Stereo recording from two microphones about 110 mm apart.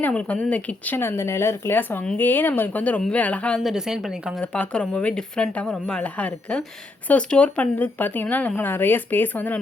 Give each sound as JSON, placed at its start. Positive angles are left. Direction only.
{"t": 0.0, "sound": "speech", "side_deg": 10}
{"t": 3.6, "sound": "a woman's voice", "side_deg": -5}
{"t": 4.4, "sound": "speech", "side_deg": 10}